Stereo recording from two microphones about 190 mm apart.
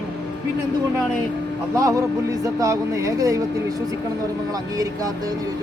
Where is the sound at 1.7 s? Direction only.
15° right (ahead or behind).